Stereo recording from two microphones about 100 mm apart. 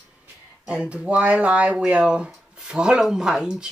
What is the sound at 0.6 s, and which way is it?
Speech, 10° right (ahead or behind).